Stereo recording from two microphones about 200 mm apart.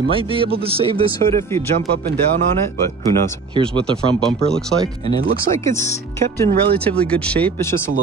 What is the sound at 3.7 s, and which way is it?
Speech, 5° left (ahead or behind).